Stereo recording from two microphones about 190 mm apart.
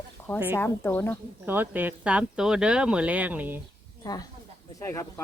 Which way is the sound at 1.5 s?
10° right (ahead or behind).